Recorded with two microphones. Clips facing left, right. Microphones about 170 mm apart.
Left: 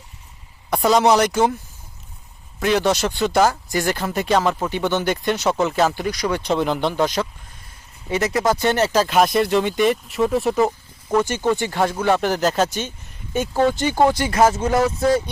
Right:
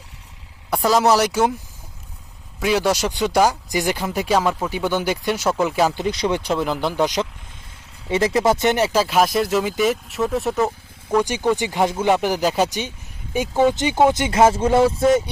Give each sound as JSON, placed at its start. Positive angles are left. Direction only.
{"t": 0.8, "sound": "speech", "side_deg": 0}
{"t": 2.6, "sound": "speech", "side_deg": -5}
{"t": 6.0, "sound": "speech", "side_deg": -25}
{"t": 6.4, "sound": "speech", "side_deg": -5}
{"t": 7.0, "sound": "speech", "side_deg": -15}
{"t": 8.1, "sound": "speech", "side_deg": -25}
{"t": 11.2, "sound": "speech", "side_deg": -15}